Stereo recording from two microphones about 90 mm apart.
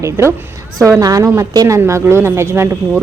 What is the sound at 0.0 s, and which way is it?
Speech, 30° right (ahead or behind).